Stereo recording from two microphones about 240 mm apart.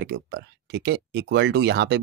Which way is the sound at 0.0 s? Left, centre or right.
Right.